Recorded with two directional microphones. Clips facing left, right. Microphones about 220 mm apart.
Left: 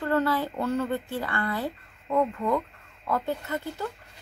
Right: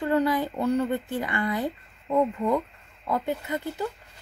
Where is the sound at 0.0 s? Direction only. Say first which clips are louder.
Right 2 dB; 15° right (ahead or behind).